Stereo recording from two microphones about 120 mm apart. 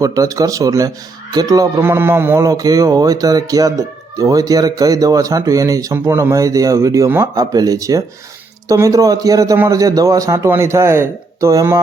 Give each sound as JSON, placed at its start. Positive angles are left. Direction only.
{"t": 0.0, "sound": "speech", "side_deg": -30}
{"t": 1.8, "sound": "speech", "side_deg": -20}